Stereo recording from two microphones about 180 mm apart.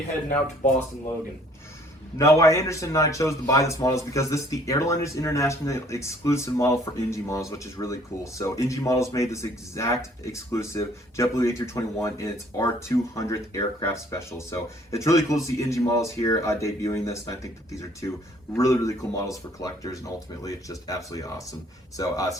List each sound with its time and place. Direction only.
2.1 s a man's voice: 15° left (ahead or behind)